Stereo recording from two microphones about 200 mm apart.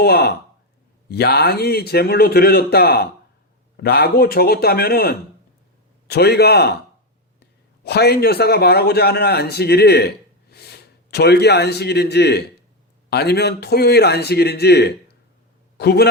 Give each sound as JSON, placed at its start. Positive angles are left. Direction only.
{"t": 0.0, "sound": "a man's voice", "side_deg": 55}
{"t": 7.9, "sound": "a man's voice", "side_deg": 55}